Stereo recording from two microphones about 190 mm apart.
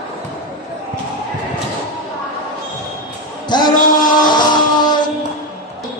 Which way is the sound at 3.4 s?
20° left (ahead or behind).